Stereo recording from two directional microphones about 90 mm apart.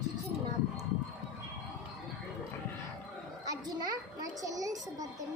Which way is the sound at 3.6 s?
45° right (ahead or behind).